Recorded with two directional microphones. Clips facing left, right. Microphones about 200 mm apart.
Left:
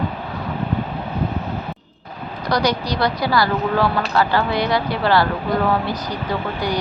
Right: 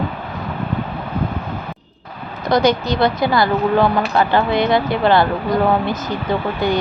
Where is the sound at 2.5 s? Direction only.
25° right (ahead or behind).